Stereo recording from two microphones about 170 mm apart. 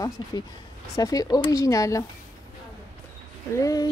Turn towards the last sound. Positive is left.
turn(degrees=20)  # may be behind; listen again after turning